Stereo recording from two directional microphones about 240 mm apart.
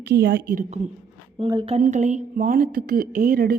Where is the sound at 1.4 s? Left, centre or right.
Centre.